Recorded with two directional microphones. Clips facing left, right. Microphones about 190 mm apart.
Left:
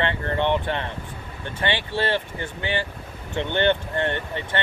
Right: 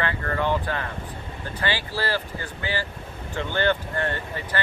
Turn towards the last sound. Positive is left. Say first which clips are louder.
# left 2 dB
turn(degrees=25)  # may be behind; listen again after turning